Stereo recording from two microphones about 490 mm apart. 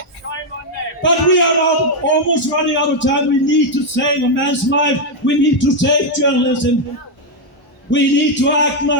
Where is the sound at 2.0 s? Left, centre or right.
Left.